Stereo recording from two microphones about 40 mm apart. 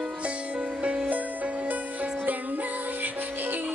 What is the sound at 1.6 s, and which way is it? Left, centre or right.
Music, right.